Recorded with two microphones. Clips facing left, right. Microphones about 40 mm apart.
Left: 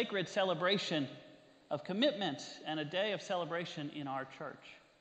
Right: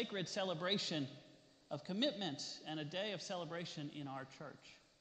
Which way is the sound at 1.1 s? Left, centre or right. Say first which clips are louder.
Left 6 dB; left.